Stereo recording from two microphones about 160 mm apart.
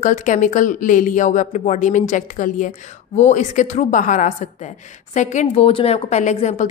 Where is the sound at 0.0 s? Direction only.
50° left (ahead or behind).